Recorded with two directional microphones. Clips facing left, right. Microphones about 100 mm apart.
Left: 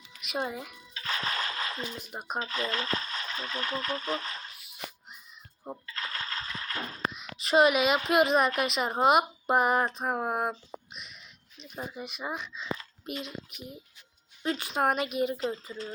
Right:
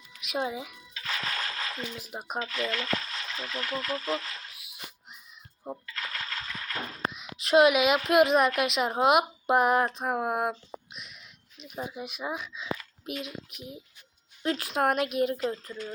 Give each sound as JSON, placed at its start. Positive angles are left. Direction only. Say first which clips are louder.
{"t": 0.2, "sound": "speech", "louder": "right 2 dB", "side_deg": 0}
{"t": 0.9, "sound": "music", "louder": "left 1 dB", "side_deg": 35}
{"t": 1.7, "sound": "speech", "louder": "even", "side_deg": 30}
{"t": 2.0, "sound": "speech", "louder": "even", "side_deg": 0}
{"t": 2.4, "sound": "speech", "louder": "right 1 dB", "side_deg": 35}
{"t": 4.5, "sound": "a sound", "louder": "right 1 dB", "side_deg": 0}
{"t": 5.8, "sound": "music", "louder": "even", "side_deg": 30}
{"t": 7.1, "sound": "a sound", "louder": "right 4 dB", "side_deg": 0}
{"t": 8.1, "sound": "speech", "louder": "right 3 dB", "side_deg": 0}